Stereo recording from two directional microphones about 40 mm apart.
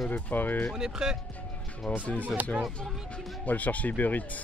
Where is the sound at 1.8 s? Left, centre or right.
Centre.